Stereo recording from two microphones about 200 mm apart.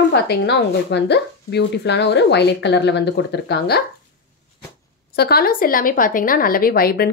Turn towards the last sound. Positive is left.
turn(degrees=50)  # may be behind; listen again after turning